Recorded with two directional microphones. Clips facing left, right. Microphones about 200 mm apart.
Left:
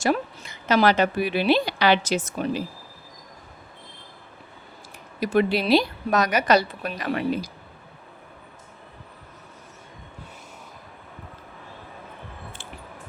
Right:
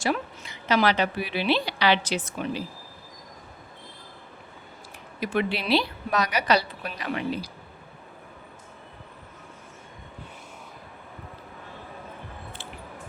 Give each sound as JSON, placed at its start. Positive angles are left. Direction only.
{"t": 0.0, "sound": "a woman's voice", "side_deg": 45}
{"t": 5.2, "sound": "a woman's voice", "side_deg": 40}